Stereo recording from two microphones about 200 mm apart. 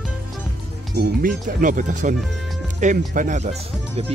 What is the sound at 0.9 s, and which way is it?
Speech, 40° right (ahead or behind).